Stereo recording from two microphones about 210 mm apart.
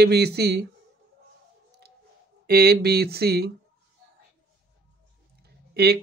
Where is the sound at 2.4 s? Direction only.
45° right (ahead or behind).